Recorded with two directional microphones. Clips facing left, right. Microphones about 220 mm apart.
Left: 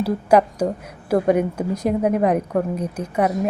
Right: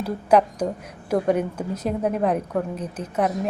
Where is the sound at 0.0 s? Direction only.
10° left (ahead or behind).